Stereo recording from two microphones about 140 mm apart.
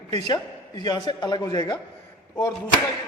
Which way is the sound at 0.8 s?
25° left (ahead or behind).